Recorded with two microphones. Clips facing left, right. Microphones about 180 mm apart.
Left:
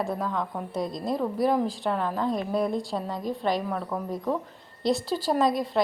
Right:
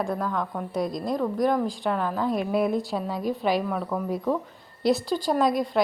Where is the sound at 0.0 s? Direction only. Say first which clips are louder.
Right 1 dB; centre (ahead or behind).